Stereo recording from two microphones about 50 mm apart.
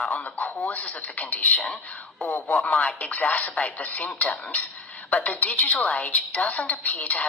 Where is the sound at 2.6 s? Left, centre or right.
Left.